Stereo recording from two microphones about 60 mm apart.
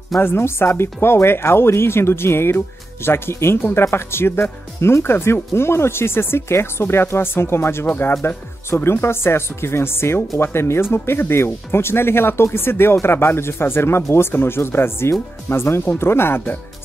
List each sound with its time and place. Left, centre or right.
0.2 s speech: left